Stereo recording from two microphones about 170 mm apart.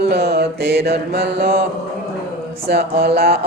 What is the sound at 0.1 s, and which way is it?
Mantra, 70° right (ahead or behind).